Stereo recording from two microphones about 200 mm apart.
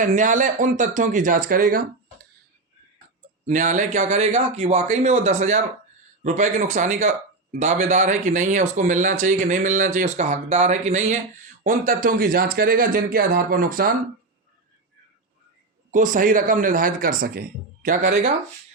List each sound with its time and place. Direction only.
0.0 s speech: 40° right (ahead or behind)
3.4 s speech: 40° right (ahead or behind)
15.9 s speech: 40° right (ahead or behind)